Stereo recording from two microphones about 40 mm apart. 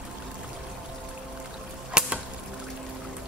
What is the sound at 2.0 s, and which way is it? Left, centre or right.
Arrow, centre.